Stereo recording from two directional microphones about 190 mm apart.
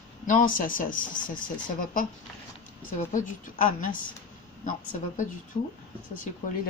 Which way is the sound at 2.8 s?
40° left (ahead or behind).